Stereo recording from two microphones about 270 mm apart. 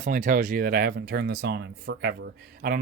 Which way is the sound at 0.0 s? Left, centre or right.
Right.